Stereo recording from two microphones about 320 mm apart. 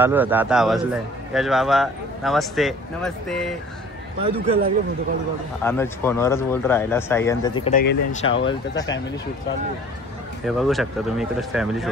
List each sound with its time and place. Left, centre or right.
0.0 s a man's voice: centre
4.2 s a man's voice: centre
5.6 s speech: centre
7.7 s speech: left
8.5 s speech: centre
10.4 s a man's voice: centre